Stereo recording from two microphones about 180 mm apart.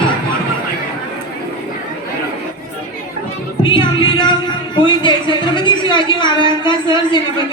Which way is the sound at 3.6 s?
25° left (ahead or behind).